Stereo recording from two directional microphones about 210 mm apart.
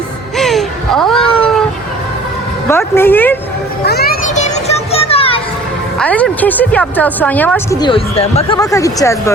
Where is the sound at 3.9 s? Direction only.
45° left (ahead or behind); by 5.4 s 25° left (ahead or behind).